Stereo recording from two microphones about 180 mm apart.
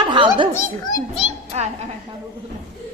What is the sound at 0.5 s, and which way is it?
Speech, 20° left (ahead or behind).